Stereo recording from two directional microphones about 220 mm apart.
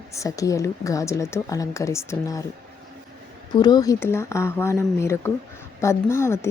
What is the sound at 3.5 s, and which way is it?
Speech, 20° left (ahead or behind).